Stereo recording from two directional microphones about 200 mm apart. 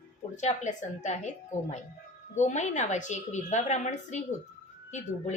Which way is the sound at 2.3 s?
35° left (ahead or behind).